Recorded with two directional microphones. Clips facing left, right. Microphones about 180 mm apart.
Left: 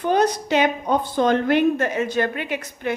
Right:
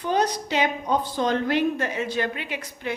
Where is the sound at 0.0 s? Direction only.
50° left (ahead or behind).